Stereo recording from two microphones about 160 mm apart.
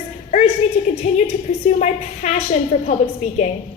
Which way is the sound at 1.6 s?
45° left (ahead or behind).